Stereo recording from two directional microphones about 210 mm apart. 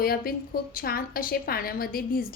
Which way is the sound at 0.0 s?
45° left (ahead or behind).